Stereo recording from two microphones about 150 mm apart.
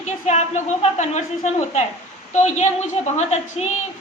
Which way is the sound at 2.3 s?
50° left (ahead or behind).